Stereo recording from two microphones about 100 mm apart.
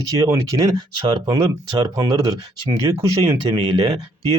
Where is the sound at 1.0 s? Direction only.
50° right (ahead or behind).